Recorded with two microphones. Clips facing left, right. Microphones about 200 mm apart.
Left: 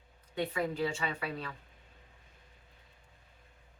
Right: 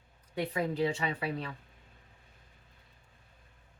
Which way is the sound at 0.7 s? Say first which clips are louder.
Right 3 dB; 35° right (ahead or behind).